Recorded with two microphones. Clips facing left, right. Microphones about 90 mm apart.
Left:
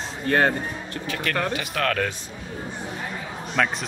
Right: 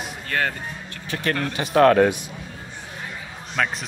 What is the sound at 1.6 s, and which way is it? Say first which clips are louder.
Speech: right 10 dB; 25° right (ahead or behind).